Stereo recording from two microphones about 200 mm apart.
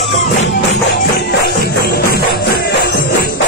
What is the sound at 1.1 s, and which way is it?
Music, 50° left (ahead or behind).